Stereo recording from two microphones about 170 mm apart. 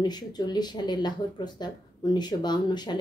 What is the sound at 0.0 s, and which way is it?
A woman's voice, 25° left (ahead or behind).